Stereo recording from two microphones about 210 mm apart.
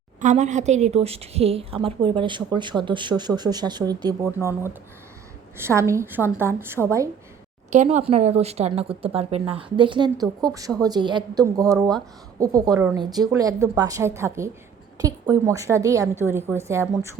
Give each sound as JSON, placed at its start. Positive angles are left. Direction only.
{"t": 0.2, "sound": "a woman's voice", "side_deg": -35}
{"t": 5.5, "sound": "a woman's voice", "side_deg": -10}
{"t": 7.7, "sound": "a woman's voice", "side_deg": -35}